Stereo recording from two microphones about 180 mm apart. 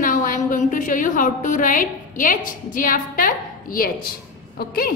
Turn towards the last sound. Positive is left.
turn(degrees=55)  # may be behind; listen again after turning